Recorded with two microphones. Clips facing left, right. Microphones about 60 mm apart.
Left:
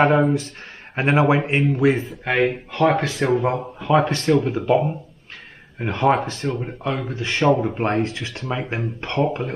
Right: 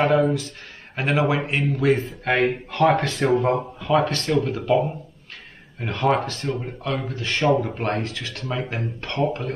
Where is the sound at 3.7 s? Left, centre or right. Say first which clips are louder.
Left 2 dB; left.